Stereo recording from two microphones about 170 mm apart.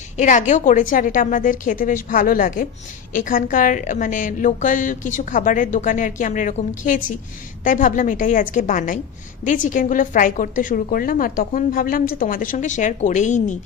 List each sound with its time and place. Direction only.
0.2 s a woman's voice: 45° left (ahead or behind)